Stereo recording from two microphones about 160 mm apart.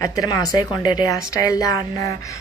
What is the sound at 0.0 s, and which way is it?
A woman's voice, 20° left (ahead or behind).